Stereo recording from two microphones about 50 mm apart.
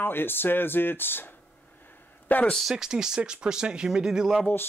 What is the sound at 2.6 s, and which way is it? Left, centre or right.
Speech, centre.